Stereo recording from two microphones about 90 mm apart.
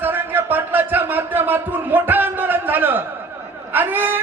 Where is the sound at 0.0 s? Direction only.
20° right (ahead or behind).